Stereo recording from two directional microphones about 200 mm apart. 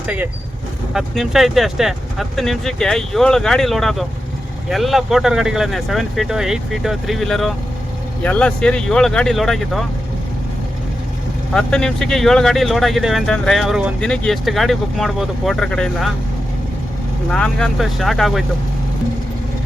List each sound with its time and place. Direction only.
0.9 s speech: centre (ahead or behind)
11.5 s speech: 5° left (ahead or behind)
17.3 s speech: 5° left (ahead or behind)